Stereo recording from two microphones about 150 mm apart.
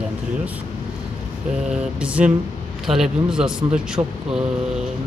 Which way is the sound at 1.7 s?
10° right (ahead or behind).